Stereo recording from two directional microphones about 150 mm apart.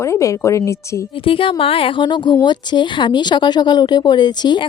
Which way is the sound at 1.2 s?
35° left (ahead or behind).